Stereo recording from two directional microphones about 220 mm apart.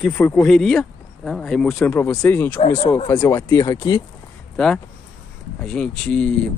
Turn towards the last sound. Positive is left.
turn(degrees=5)  # may be behind; listen again after turning